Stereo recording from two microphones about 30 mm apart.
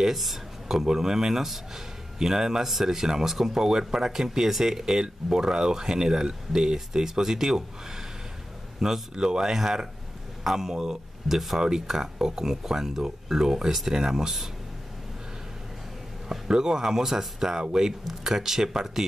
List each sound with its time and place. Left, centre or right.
0.0 s speech: centre
0.7 s speech: centre
9.1 s speech: right
16.3 s speech: right